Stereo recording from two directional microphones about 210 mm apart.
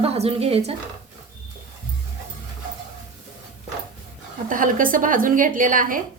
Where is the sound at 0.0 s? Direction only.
30° right (ahead or behind).